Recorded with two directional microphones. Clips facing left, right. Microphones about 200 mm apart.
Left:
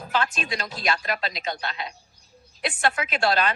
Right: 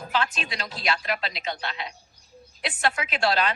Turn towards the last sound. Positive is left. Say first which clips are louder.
# left 1 dB
turn(degrees=50)  # may be behind; listen again after turning